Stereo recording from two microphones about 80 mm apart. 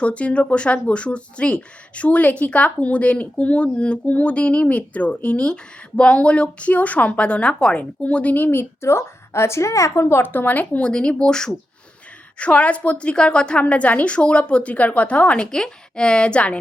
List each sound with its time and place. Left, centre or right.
0.0 s a woman's voice: centre